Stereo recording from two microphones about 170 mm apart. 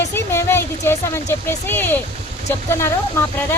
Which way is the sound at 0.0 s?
15° left (ahead or behind).